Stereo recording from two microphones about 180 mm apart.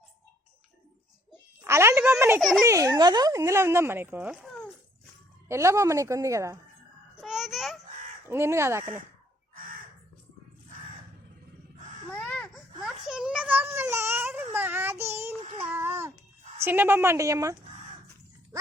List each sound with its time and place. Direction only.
1.6 s a sound: 15° right (ahead or behind)
2.4 s a child's voice: centre (ahead or behind)
2.6 s speech: 15° right (ahead or behind); by 4.7 s centre (ahead or behind)
5.5 s speech: 15° right (ahead or behind)
7.2 s babbling: centre (ahead or behind)
8.3 s speech: 15° right (ahead or behind)
12.1 s baby cry: 5° left (ahead or behind); by 15.3 s 15° right (ahead or behind)
15.4 s child singing: 35° right (ahead or behind)
15.7 s babbling: 15° right (ahead or behind)
16.6 s speech: 10° right (ahead or behind)